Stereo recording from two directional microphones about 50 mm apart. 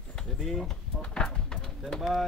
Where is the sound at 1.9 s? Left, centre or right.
Centre.